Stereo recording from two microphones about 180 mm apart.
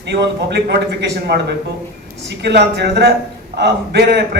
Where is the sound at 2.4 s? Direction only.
65° right (ahead or behind).